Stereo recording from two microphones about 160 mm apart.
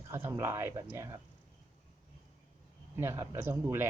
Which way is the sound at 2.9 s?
15° right (ahead or behind).